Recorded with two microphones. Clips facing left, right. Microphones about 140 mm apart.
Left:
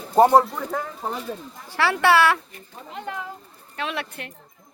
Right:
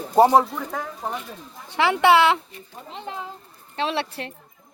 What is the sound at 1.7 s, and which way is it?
Speech, 20° right (ahead or behind).